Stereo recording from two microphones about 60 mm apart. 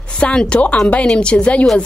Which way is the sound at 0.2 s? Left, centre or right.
Centre.